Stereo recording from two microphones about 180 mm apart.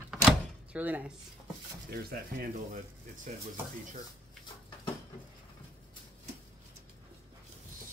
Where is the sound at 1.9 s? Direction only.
55° right (ahead or behind).